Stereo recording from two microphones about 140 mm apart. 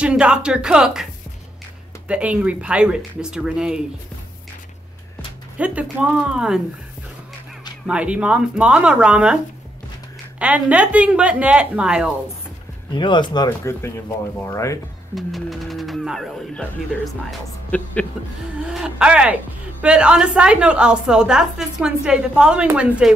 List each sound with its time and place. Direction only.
0.0 s a woman's voice: 5° right (ahead or behind)
2.0 s a woman's voice: 10° right (ahead or behind)
5.6 s a woman's voice: 10° right (ahead or behind)
7.8 s a woman's voice: 10° right (ahead or behind)
10.4 s a woman's voice: 10° right (ahead or behind)
12.9 s speech: 35° left (ahead or behind)
13.5 s speech: 20° left (ahead or behind)
15.1 s speech: centre (ahead or behind)
18.7 s a woman's voice: 5° right (ahead or behind)